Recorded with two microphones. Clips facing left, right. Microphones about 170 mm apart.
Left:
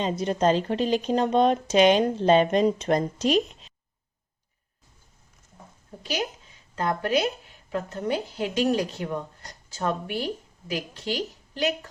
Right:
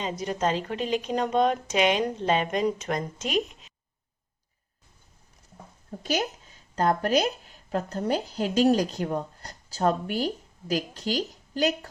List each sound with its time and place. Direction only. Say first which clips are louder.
0.0 s speech: left 4 dB; 30° left (ahead or behind)
6.0 s a woman's voice: right 2 dB; 45° right (ahead or behind)